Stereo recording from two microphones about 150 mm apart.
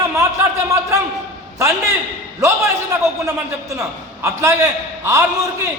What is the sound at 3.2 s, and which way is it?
A man's voice, 20° right (ahead or behind).